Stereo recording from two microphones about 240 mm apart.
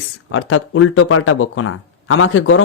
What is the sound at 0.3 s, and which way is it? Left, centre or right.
Speech, left.